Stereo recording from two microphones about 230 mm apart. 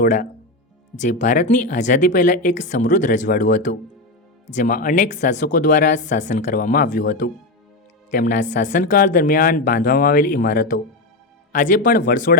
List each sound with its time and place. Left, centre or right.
0.0 s speech: left